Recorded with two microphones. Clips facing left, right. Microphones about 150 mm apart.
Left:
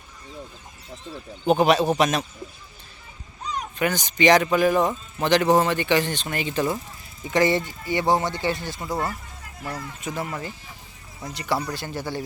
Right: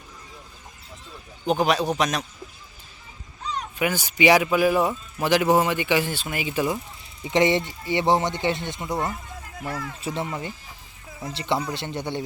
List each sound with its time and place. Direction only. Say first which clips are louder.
1.5 s a man's voice: left 3 dB; centre (ahead or behind)
3.8 s a man's voice: even; 10° right (ahead or behind)
7.3 s speech: even; 20° right (ahead or behind)
8.9 s a man's voice: even; centre (ahead or behind)
10.0 s speech: even; 30° right (ahead or behind)